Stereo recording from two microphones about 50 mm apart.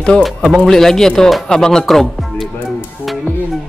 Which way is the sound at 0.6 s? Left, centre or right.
Centre.